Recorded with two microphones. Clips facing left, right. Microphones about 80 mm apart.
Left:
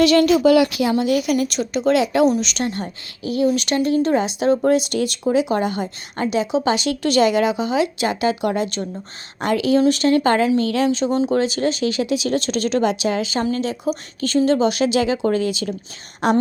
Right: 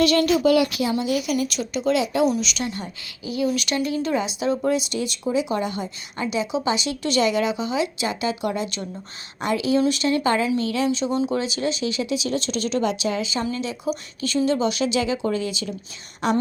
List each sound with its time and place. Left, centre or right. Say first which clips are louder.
0.0 s speech: left 4 dB; left
0.9 s a woman's voice: left 5 dB; left
7.7 s a woman's voice: left 5 dB; left
10.6 s a woman's voice: left 4 dB; left
10.9 s a woman's voice: left 4 dB; left
13.4 s speech: left 5 dB; left